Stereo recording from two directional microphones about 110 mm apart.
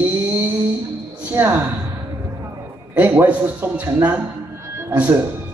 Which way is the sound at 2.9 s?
15° right (ahead or behind).